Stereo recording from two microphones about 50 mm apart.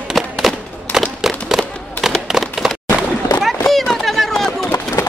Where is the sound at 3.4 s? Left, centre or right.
Centre.